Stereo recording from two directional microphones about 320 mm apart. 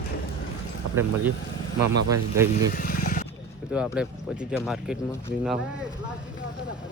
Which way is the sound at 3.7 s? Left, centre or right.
Centre.